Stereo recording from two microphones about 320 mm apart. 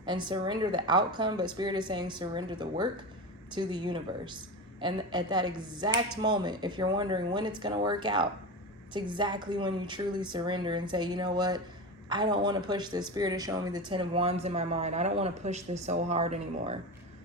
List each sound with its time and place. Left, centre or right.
0.0 s speech: centre